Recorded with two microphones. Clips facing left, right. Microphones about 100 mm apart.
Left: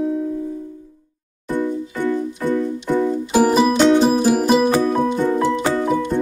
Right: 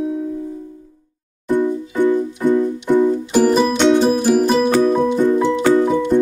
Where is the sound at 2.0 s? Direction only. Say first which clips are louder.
Right 6 dB; 15° right (ahead or behind).